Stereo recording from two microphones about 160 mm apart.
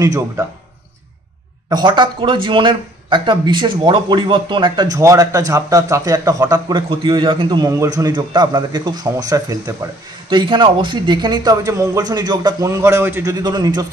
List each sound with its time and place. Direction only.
0.0 s speech: 20° right (ahead or behind)
1.7 s speech: 30° right (ahead or behind)